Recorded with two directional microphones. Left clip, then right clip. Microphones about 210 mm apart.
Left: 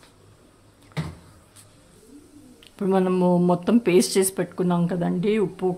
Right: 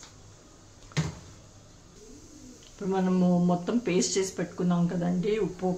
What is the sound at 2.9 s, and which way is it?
Speech, 55° left (ahead or behind).